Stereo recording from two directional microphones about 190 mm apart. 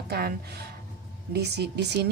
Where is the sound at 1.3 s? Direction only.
60° right (ahead or behind).